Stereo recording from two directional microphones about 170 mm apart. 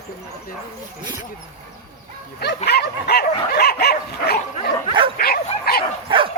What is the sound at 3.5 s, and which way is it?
Dog, 65° left (ahead or behind).